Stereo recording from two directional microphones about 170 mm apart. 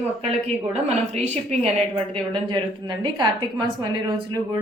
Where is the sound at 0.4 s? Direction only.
40° right (ahead or behind).